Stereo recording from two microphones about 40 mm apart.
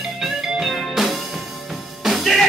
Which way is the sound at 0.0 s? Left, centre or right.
Centre.